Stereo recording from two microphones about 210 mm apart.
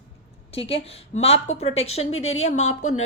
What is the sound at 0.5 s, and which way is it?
A woman's voice, 30° left (ahead or behind).